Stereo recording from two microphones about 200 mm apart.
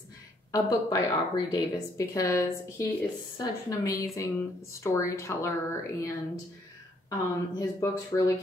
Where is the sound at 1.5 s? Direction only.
15° left (ahead or behind).